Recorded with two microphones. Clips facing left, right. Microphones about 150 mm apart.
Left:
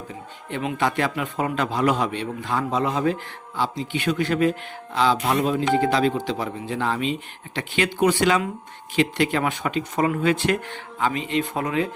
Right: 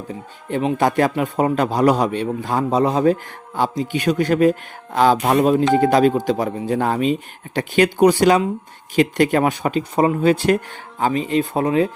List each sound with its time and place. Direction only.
0.5 s a man's voice: 40° right (ahead or behind)